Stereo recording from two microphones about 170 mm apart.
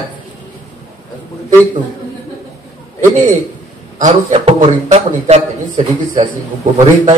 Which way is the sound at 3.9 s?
45° right (ahead or behind).